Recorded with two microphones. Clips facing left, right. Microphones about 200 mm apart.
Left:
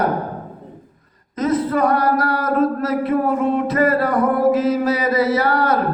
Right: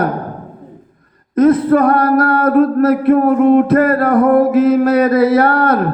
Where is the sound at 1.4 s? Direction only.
55° right (ahead or behind).